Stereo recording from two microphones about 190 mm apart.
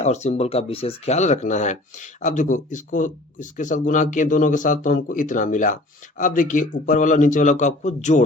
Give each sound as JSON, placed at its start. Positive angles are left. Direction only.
{"t": 0.0, "sound": "speech", "side_deg": 35}